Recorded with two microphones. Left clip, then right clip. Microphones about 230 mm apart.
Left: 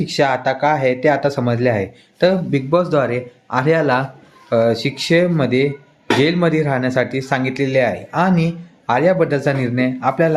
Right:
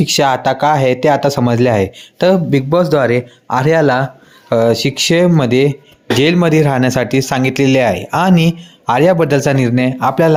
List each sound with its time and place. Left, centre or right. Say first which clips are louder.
0.0 s speech: right 4 dB; right